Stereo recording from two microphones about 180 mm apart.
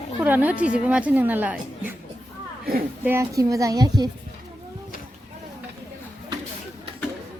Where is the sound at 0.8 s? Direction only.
5° right (ahead or behind).